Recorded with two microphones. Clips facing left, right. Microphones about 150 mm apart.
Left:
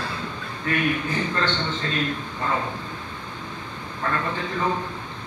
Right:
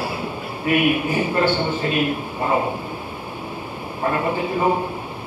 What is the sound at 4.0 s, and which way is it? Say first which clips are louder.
Speech: right 6 dB; 20° right (ahead or behind).